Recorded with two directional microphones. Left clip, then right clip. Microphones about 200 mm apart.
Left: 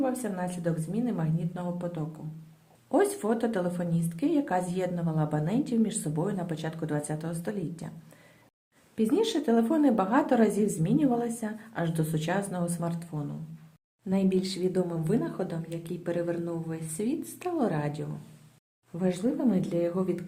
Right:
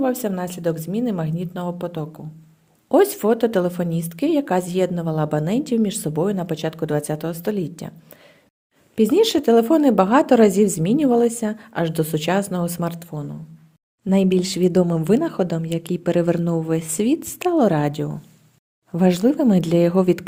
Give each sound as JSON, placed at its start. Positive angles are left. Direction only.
{"t": 0.0, "sound": "a woman's voice", "side_deg": -45}
{"t": 9.0, "sound": "a woman's voice", "side_deg": -45}